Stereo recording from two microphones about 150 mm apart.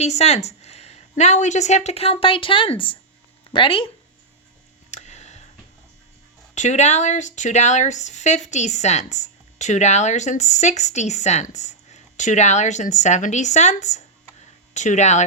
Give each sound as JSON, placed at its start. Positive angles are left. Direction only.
{"t": 0.0, "sound": "speech", "side_deg": 45}
{"t": 4.9, "sound": "a sound", "side_deg": 50}
{"t": 6.5, "sound": "speech", "side_deg": 50}